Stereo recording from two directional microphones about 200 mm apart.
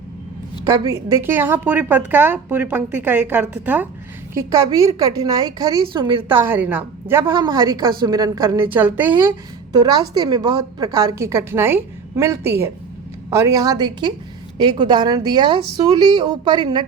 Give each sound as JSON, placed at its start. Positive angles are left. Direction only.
{"t": 0.9, "sound": "a woman's voice", "side_deg": -15}
{"t": 6.4, "sound": "a woman's voice", "side_deg": -10}
{"t": 8.7, "sound": "a woman's voice", "side_deg": -10}
{"t": 9.7, "sound": "a woman's voice", "side_deg": -20}